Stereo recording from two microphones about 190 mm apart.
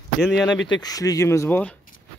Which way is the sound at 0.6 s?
20° left (ahead or behind).